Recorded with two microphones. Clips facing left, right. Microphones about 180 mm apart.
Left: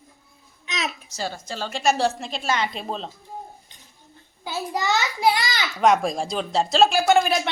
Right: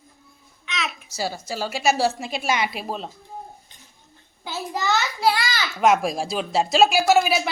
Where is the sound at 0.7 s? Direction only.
35° left (ahead or behind).